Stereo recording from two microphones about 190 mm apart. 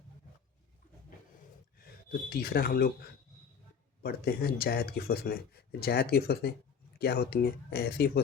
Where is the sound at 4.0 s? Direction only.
55° left (ahead or behind).